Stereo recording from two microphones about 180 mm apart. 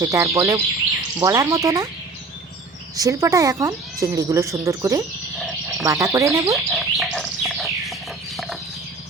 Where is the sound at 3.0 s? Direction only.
20° right (ahead or behind).